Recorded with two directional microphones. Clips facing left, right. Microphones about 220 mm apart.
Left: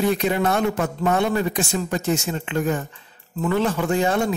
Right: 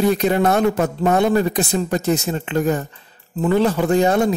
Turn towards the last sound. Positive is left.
turn(degrees=-40)  # may be behind; listen again after turning